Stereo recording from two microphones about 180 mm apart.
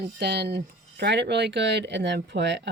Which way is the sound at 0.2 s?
65° right (ahead or behind).